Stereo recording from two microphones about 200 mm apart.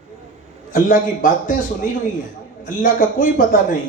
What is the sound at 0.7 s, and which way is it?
Speech, 40° left (ahead or behind).